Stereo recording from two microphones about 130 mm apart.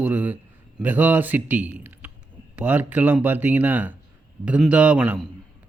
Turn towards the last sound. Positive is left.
turn(degrees=-10)  # may be behind; listen again after turning